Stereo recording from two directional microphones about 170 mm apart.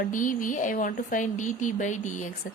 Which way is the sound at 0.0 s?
50° left (ahead or behind).